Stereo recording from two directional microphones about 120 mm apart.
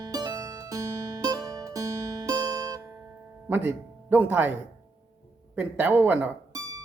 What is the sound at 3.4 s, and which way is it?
Music, 15° right (ahead or behind).